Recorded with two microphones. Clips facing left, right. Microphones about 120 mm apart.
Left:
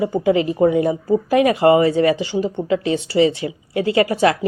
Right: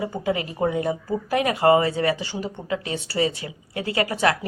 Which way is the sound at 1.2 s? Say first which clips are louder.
Left 4 dB; 25° left (ahead or behind).